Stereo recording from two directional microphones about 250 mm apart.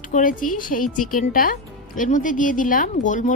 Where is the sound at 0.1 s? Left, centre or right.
Left.